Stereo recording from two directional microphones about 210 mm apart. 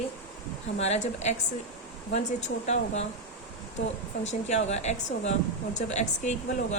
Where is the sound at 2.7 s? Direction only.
30° left (ahead or behind).